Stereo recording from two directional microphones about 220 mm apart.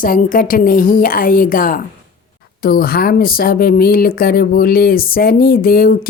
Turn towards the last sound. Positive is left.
turn(degrees=45)  # may be behind; listen again after turning